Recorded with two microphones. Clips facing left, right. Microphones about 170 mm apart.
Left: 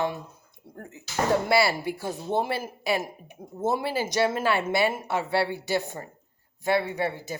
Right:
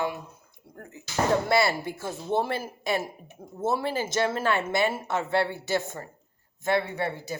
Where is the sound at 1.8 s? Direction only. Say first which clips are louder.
Left 3 dB; 15° left (ahead or behind).